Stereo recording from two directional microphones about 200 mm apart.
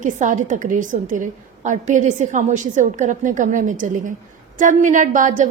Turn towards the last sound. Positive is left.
turn(degrees=-40)  # may be behind; listen again after turning